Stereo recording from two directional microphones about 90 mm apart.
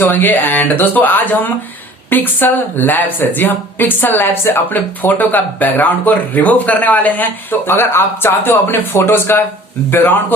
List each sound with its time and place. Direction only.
0.0 s speech: 20° left (ahead or behind)